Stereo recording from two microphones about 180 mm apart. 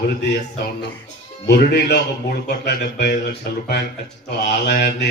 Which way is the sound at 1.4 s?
70° left (ahead or behind).